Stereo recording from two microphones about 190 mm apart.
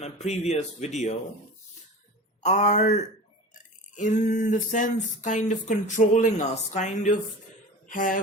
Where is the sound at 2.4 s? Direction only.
40° left (ahead or behind).